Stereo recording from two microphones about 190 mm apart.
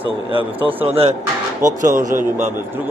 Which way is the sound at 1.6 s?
45° right (ahead or behind).